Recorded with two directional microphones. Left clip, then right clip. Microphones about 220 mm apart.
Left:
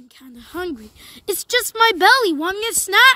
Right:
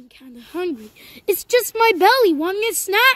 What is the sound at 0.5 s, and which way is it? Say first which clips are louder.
Speech: right 2 dB; 20° left (ahead or behind).